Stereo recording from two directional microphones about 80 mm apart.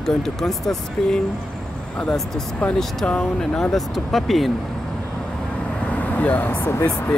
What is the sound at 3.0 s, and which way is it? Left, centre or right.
Speech, centre.